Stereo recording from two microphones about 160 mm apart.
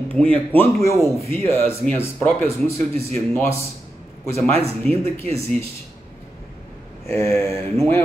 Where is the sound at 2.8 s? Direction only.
40° right (ahead or behind).